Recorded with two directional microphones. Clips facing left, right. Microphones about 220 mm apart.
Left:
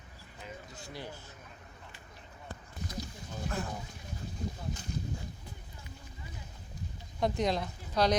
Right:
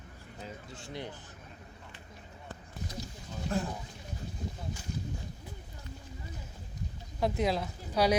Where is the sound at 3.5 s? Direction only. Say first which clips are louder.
Right 5 dB; 30° right (ahead or behind).